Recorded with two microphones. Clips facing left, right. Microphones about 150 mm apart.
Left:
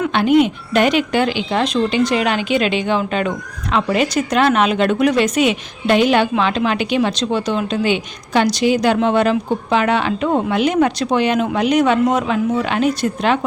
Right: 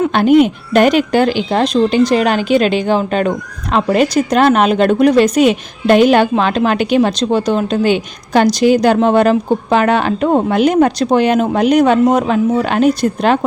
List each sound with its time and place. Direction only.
0.0 s speech: 45° right (ahead or behind)